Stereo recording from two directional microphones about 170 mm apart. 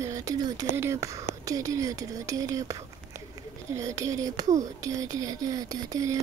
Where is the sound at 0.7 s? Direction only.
15° right (ahead or behind).